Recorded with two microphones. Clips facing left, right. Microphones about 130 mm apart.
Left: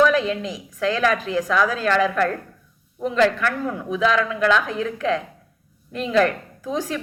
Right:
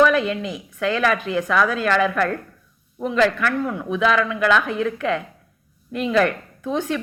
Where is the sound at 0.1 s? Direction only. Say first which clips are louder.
Even; 35° left (ahead or behind).